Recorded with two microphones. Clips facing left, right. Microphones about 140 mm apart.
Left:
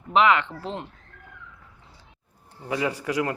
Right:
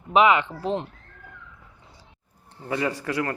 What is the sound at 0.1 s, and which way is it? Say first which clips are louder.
Speech: right 1 dB; 15° right (ahead or behind).